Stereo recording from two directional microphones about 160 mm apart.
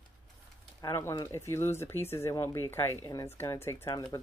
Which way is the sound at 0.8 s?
20° left (ahead or behind).